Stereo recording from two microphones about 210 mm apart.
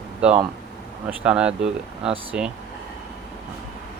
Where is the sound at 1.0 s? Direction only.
5° right (ahead or behind).